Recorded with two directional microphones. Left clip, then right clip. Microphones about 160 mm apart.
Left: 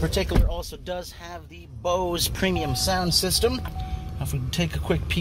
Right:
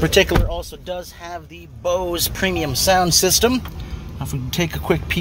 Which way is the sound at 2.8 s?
45° right (ahead or behind).